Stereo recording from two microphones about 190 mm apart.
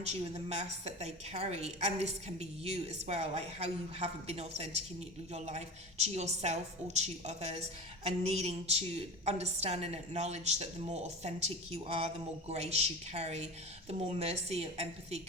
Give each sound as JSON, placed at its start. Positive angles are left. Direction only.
{"t": 0.0, "sound": "a woman's voice", "side_deg": -35}